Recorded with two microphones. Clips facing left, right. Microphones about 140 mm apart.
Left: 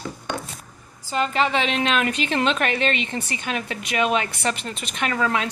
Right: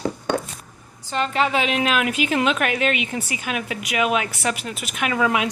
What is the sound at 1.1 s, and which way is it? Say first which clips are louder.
A woman's voice: even; centre (ahead or behind).